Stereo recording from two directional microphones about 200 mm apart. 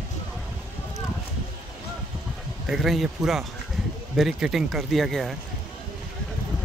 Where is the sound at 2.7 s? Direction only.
Centre (ahead or behind).